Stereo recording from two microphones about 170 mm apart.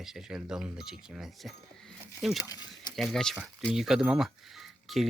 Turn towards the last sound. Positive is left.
turn(degrees=0)  # may be behind; listen again after turning